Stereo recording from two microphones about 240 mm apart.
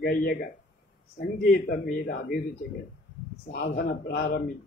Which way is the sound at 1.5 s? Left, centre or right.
Left.